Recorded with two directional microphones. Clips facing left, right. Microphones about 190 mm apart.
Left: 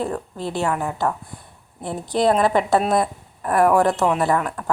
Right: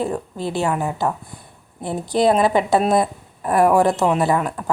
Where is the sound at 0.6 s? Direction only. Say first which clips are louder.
Right 1 dB; 20° right (ahead or behind).